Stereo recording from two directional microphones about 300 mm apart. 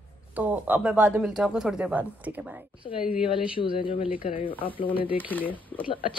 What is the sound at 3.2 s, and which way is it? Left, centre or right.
Speech, centre.